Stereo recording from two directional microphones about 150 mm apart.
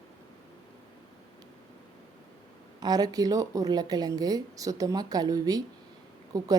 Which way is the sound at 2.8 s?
25° right (ahead or behind).